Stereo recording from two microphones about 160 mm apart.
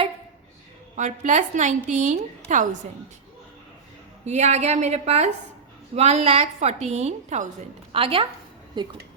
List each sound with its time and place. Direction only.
0.9 s a woman's voice: 50° right (ahead or behind)
4.3 s a woman's voice: 45° right (ahead or behind)
7.9 s a woman's voice: 35° right (ahead or behind)